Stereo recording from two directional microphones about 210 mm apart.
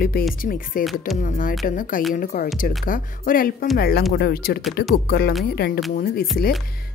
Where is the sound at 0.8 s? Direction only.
Centre (ahead or behind).